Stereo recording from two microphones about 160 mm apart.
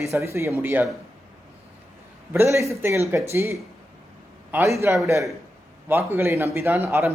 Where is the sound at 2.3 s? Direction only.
15° right (ahead or behind).